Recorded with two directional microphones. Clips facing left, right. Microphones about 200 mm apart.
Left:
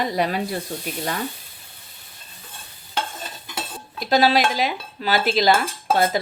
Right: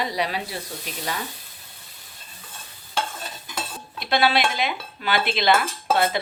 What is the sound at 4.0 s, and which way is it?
Speech, 40° left (ahead or behind).